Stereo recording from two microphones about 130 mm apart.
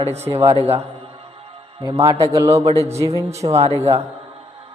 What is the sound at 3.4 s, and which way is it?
Speech, 55° right (ahead or behind).